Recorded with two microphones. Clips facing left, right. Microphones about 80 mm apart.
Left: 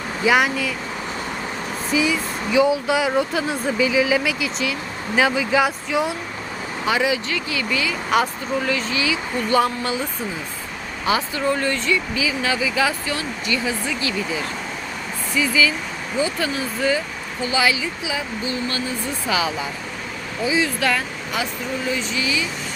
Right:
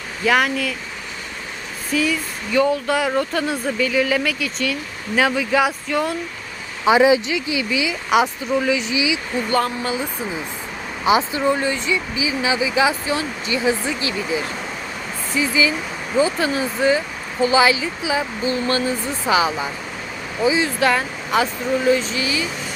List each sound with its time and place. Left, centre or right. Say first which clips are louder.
0.3 s speech: even; centre
1.9 s speech: even; centre
6.8 s speech: right 7 dB; right
9.5 s speech: left 2 dB; centre
11.0 s speech: right 4 dB; centre
15.4 s speech: even; right